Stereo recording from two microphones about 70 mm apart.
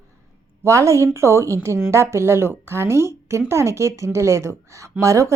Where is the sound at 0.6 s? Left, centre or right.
Right.